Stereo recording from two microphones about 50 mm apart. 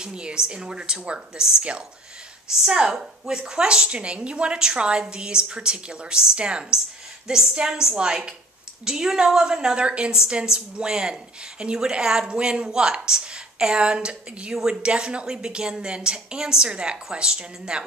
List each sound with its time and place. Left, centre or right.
0.0 s speech: centre